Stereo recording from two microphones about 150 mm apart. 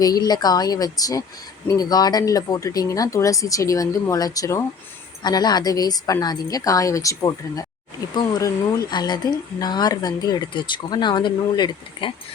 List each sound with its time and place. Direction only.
0.0 s speech: 25° left (ahead or behind)